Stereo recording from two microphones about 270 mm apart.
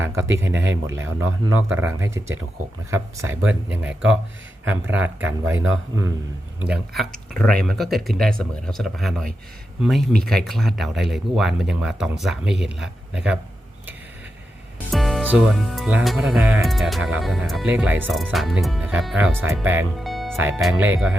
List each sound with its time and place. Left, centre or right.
0.3 s speech: centre
1.0 s speech: right
1.9 s speech: centre
14.8 s speech: centre